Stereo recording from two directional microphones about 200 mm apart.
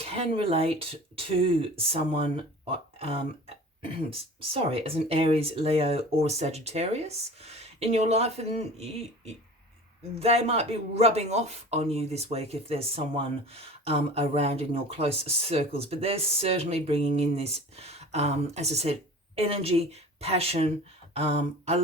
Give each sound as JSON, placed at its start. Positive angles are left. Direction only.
{"t": 0.0, "sound": "speech", "side_deg": -30}